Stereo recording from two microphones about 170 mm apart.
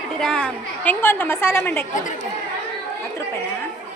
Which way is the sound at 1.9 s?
50° left (ahead or behind).